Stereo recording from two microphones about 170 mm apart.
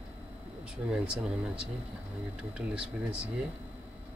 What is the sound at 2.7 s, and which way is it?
Speech, 5° right (ahead or behind).